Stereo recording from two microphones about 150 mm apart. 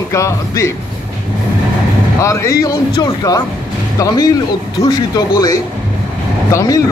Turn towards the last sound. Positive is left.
turn(degrees=20)  # may be behind; listen again after turning